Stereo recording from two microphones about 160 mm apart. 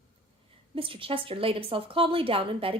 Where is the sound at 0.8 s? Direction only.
35° right (ahead or behind).